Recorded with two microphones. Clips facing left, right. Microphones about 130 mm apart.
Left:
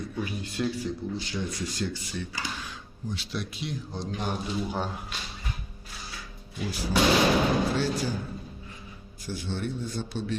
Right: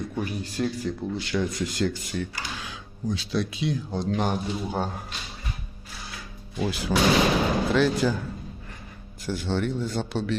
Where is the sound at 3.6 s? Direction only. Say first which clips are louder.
Right 7 dB; 65° right (ahead or behind).